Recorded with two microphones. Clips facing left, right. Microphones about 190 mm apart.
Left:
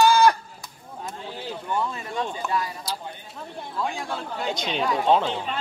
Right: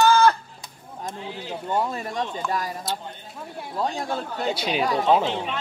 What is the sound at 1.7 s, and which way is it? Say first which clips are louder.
Speech: right 3 dB; 40° right (ahead or behind).